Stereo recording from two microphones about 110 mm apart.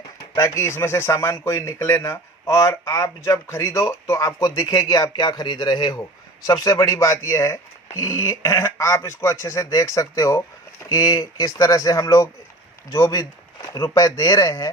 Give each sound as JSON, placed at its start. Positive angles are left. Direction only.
{"t": 0.3, "sound": "speech", "side_deg": 25}